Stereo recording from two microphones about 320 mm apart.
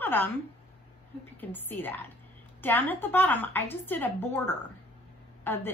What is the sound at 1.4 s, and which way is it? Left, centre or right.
A woman's voice, centre.